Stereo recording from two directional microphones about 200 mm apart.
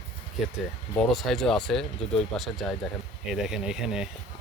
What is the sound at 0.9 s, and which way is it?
Speech, centre (ahead or behind).